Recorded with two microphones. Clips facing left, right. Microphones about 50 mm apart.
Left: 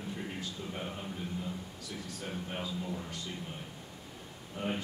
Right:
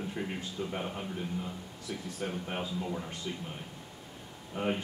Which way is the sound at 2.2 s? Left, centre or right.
Right.